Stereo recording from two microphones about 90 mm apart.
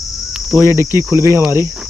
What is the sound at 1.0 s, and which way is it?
Cricket, 30° right (ahead or behind).